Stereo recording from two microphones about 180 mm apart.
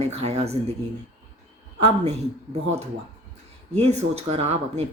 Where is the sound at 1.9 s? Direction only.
35° right (ahead or behind).